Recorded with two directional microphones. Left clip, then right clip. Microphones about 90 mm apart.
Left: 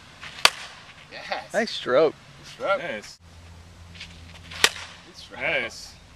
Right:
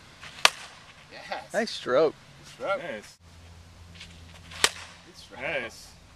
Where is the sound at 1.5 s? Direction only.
20° right (ahead or behind).